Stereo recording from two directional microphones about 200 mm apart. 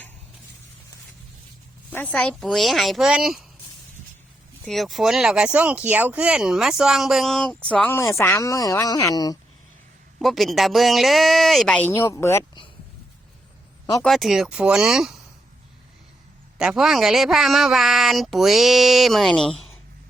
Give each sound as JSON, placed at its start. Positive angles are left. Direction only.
{"t": 1.9, "sound": "speech", "side_deg": 10}
{"t": 4.6, "sound": "speech", "side_deg": 0}
{"t": 10.2, "sound": "speech", "side_deg": 0}
{"t": 14.0, "sound": "speech", "side_deg": 0}
{"t": 16.6, "sound": "speech", "side_deg": -5}